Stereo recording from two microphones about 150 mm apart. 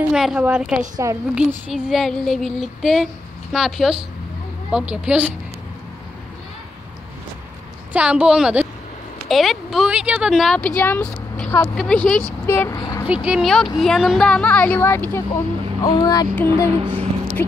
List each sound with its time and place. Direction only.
0.1 s a woman's voice: 5° right (ahead or behind)
7.9 s a woman's voice: 10° right (ahead or behind); by 12.7 s 15° left (ahead or behind)
12.7 s speech: 30° left (ahead or behind)
13.0 s a woman's voice: 5° right (ahead or behind); by 16.7 s 15° left (ahead or behind)
16.8 s speech: 40° right (ahead or behind)
17.4 s speech: 15° left (ahead or behind)